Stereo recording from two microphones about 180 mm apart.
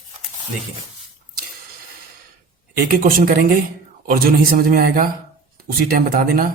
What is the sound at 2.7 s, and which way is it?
A man's voice, 55° right (ahead or behind).